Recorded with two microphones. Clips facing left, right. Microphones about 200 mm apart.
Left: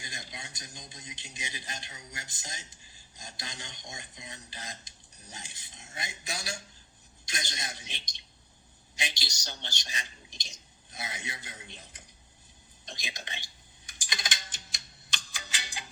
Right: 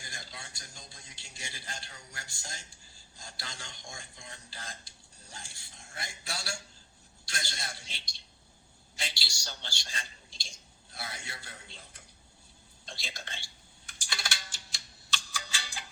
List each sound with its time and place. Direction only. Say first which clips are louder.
0.0 s a sound: left 2 dB; 20° left (ahead or behind)
7.3 s a man's voice: left 1 dB; 20° left (ahead or behind)
14.0 s music: left 1 dB; 15° left (ahead or behind)